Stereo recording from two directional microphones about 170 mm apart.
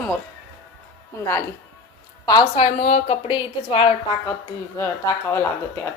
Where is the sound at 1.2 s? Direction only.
15° left (ahead or behind).